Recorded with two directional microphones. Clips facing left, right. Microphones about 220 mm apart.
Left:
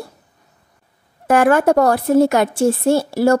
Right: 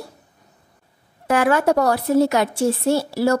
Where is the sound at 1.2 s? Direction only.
50° left (ahead or behind).